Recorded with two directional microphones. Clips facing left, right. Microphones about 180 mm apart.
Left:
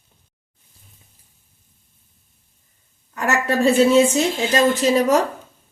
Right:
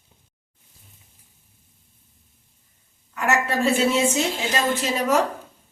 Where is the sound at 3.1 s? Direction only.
35° left (ahead or behind).